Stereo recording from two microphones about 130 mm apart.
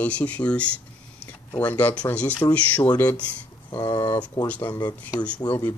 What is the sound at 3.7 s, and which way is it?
Speech, 30° left (ahead or behind).